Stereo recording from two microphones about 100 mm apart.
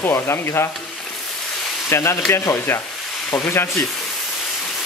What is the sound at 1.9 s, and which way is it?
Speech, 30° left (ahead or behind).